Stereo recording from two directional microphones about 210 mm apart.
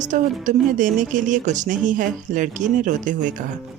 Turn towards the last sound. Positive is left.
turn(degrees=-40)  # may be behind; listen again after turning